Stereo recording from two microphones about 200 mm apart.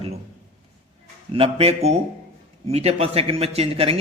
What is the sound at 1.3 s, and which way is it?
Speech, 30° right (ahead or behind).